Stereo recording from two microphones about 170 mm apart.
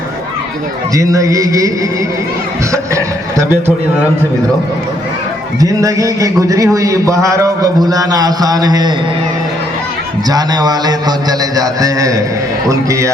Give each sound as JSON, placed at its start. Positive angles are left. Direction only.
{"t": 0.9, "sound": "a man's voice", "side_deg": -20}
{"t": 2.7, "sound": "speech", "side_deg": -15}
{"t": 5.5, "sound": "a man's voice", "side_deg": -20}
{"t": 10.2, "sound": "a man's voice", "side_deg": -25}